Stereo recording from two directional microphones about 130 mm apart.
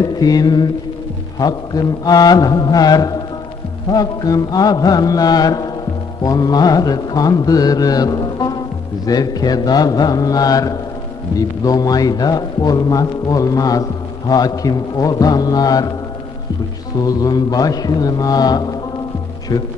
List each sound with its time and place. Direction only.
0.0 s mantra: 30° left (ahead or behind)
1.4 s a man's voice: 30° left (ahead or behind)
17.0 s a man's voice: 30° left (ahead or behind)
19.5 s mantra: 30° left (ahead or behind)